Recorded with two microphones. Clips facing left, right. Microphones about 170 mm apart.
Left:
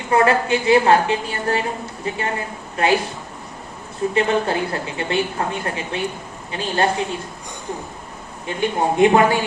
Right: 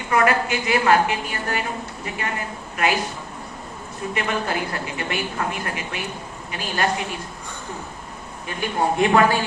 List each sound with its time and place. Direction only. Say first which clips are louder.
0.1 s a woman's voice: left 3 dB; 30° left (ahead or behind)
4.1 s a woman's voice: left 5 dB; 30° left (ahead or behind)
8.4 s a woman's voice: left 3 dB; 25° left (ahead or behind)